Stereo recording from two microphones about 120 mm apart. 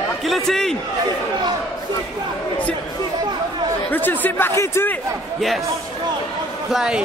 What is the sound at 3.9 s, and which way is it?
A man's voice, 15° left (ahead or behind).